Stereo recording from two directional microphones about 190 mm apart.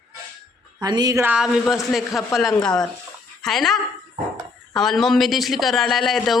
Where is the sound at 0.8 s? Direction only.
20° right (ahead or behind); by 2.2 s centre (ahead or behind).